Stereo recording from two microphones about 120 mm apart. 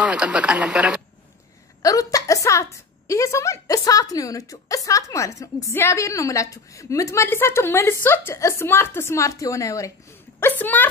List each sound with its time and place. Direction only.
0.0 s a man's voice: 10° right (ahead or behind)
1.8 s a woman's voice: 30° left (ahead or behind)
10.6 s a woman's voice: 15° left (ahead or behind)